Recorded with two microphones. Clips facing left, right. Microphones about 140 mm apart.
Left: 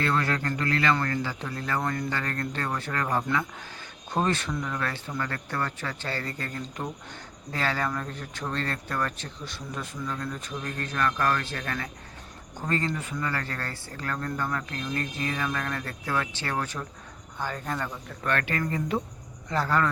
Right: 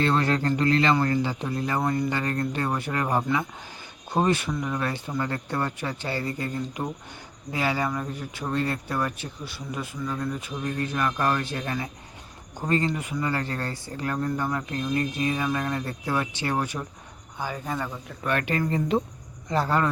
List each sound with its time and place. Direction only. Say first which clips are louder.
0.0 s speech: right 4 dB; 25° right (ahead or behind)